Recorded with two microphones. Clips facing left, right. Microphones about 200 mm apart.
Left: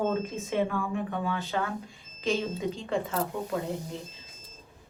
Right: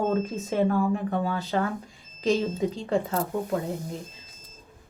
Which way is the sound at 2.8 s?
45° right (ahead or behind).